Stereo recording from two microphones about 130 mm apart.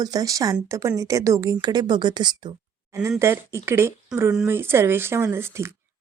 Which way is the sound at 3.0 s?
20° right (ahead or behind).